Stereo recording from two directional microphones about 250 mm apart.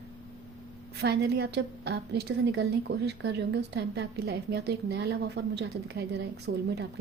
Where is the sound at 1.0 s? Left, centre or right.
Right.